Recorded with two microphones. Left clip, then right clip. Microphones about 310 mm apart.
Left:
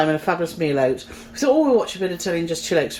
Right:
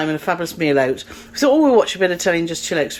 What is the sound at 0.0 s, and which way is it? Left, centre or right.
Speech, centre.